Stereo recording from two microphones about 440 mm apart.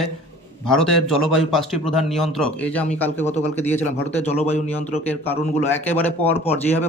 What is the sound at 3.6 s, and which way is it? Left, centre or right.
A man's voice, centre.